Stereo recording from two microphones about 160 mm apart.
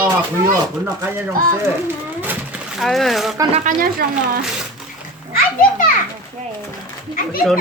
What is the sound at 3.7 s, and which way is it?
Speech, 50° right (ahead or behind).